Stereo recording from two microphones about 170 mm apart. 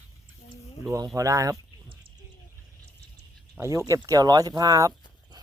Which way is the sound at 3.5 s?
15° right (ahead or behind).